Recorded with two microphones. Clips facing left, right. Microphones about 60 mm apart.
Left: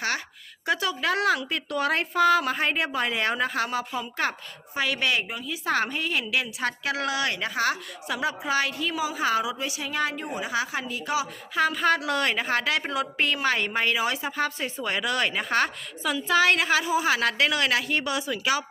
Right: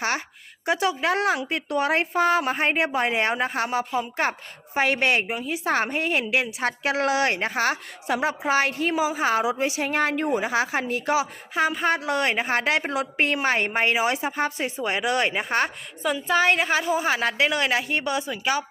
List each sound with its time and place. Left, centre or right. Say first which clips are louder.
0.6 s speech: right 3 dB; right
2.1 s a woman's voice: left 2 dB; right
11.1 s a woman's voice: right 2 dB; right
14.8 s a woman's voice: right 3 dB; centre
17.2 s speech: right 1 dB; centre